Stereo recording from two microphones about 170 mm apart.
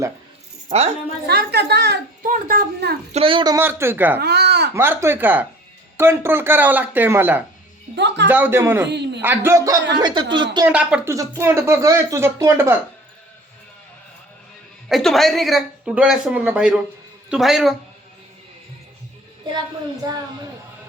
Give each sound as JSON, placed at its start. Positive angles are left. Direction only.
{"t": 1.3, "sound": "a woman's voice", "side_deg": -70}
{"t": 3.1, "sound": "speech", "side_deg": -35}
{"t": 3.6, "sound": "speech", "side_deg": -15}
{"t": 4.2, "sound": "babbling", "side_deg": -75}
{"t": 4.7, "sound": "speech", "side_deg": -15}
{"t": 7.9, "sound": "speech", "side_deg": -90}
{"t": 8.3, "sound": "speech", "side_deg": -10}
{"t": 8.9, "sound": "a man's voice", "side_deg": -85}
{"t": 9.2, "sound": "speech", "side_deg": -10}
{"t": 10.7, "sound": "speech", "side_deg": -5}
{"t": 14.8, "sound": "speech", "side_deg": 0}